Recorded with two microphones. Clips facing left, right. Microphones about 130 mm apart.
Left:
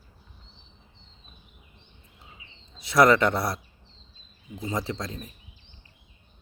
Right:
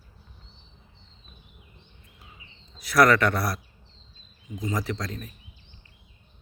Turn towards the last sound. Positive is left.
turn(degrees=25)  # may be behind; listen again after turning